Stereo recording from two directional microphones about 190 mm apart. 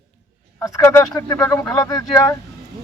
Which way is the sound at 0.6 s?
15° left (ahead or behind).